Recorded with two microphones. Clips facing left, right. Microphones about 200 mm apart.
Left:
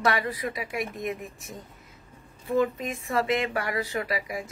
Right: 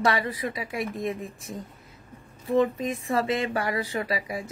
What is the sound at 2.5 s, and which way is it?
Speech, 30° right (ahead or behind).